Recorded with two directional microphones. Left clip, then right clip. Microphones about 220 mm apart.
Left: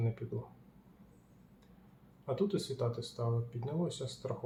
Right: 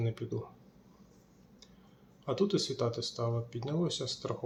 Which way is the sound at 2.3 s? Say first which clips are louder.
Right 4 dB; 25° right (ahead or behind).